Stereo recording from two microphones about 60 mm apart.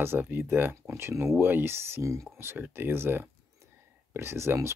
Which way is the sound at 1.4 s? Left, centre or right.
Right.